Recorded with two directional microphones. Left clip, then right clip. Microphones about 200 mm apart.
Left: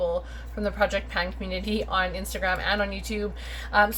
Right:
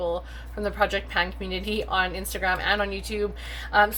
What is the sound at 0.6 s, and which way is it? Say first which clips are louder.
A woman's voice: even; 20° right (ahead or behind).